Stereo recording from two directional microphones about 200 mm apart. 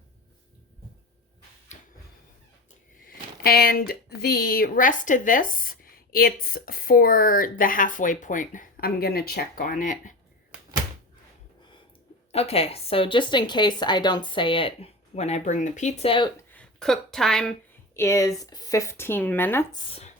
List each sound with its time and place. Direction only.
3.4 s a woman's voice: 50° left (ahead or behind)
12.3 s speech: 30° left (ahead or behind)
16.4 s a sound: 10° left (ahead or behind)
17.9 s speech: 15° left (ahead or behind)